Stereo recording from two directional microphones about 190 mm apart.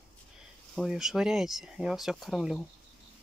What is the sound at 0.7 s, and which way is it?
Speech, centre (ahead or behind).